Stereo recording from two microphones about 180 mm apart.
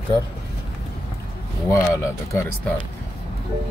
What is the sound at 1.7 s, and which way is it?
Speech, 15° left (ahead or behind).